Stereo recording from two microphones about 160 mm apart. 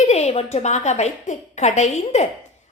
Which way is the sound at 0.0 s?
40° left (ahead or behind).